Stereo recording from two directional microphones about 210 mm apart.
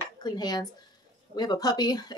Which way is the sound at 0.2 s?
20° left (ahead or behind).